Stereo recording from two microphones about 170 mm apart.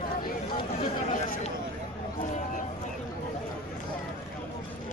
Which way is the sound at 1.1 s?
45° left (ahead or behind).